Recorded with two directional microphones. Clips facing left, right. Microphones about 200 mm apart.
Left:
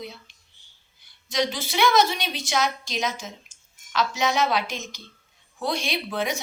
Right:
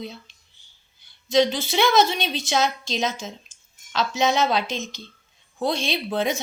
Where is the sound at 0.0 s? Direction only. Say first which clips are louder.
Right 3 dB; 25° right (ahead or behind).